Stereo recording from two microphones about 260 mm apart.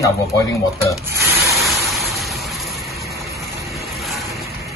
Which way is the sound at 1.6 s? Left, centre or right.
Centre.